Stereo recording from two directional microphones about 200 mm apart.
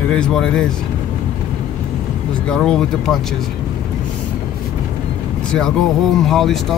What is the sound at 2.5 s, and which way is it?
Speech, 5° left (ahead or behind).